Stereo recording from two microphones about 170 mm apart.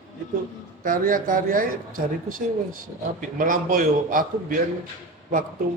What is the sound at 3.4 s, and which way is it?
Speech, 55° right (ahead or behind).